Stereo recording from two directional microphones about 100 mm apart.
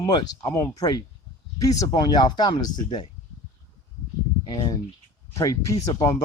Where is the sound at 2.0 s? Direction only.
45° left (ahead or behind).